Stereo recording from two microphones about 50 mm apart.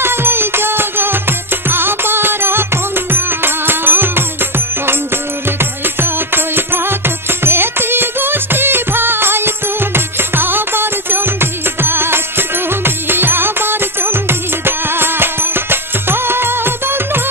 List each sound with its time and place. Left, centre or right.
0.0 s music: right